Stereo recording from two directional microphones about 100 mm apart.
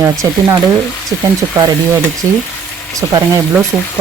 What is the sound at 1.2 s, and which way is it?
Speech, 35° right (ahead or behind).